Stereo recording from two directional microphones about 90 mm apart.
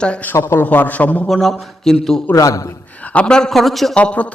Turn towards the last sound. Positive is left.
turn(degrees=15)  # may be behind; listen again after turning